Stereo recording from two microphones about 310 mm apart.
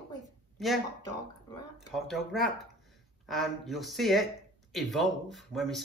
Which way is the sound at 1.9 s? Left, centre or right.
Centre.